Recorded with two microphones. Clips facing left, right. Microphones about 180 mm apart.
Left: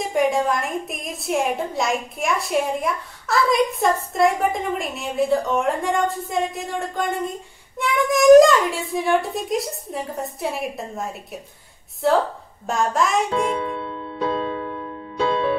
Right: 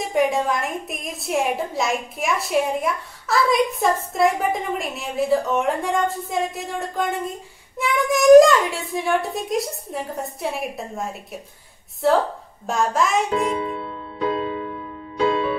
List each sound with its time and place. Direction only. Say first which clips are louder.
0.0 s a woman's voice: even; centre (ahead or behind)